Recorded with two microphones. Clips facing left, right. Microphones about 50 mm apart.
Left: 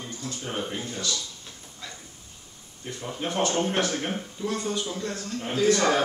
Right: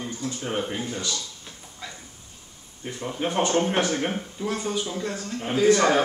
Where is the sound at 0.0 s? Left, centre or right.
Centre.